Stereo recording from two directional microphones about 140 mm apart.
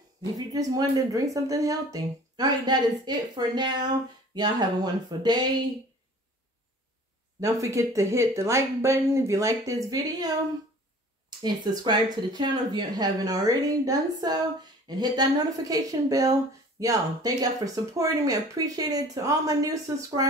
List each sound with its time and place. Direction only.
0.5 s speech: 25° right (ahead or behind)
7.3 s speech: 20° right (ahead or behind)